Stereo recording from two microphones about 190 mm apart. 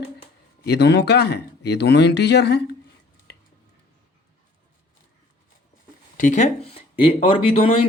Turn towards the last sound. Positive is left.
turn(degrees=30)  # may be behind; listen again after turning